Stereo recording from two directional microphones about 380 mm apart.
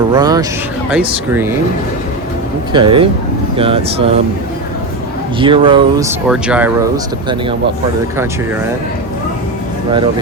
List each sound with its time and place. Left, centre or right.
0.1 s speech: centre
2.7 s speech: centre
5.4 s speech: centre
6.2 s speech: centre